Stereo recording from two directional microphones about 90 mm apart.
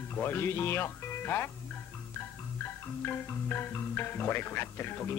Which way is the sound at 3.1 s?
25° left (ahead or behind).